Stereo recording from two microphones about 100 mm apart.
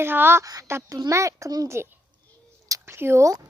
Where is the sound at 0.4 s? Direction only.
35° right (ahead or behind).